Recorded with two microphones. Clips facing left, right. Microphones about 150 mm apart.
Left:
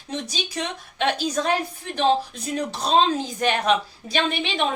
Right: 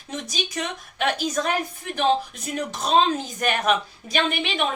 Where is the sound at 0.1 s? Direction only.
30° left (ahead or behind).